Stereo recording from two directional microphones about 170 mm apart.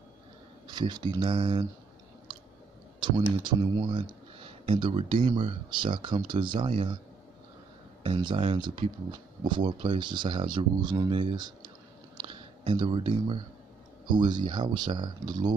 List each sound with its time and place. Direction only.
0.7 s speech: 25° right (ahead or behind)
3.0 s speech: 25° right (ahead or behind)
8.0 s speech: 30° right (ahead or behind)
12.2 s a sound: 30° right (ahead or behind)
14.1 s speech: 25° right (ahead or behind)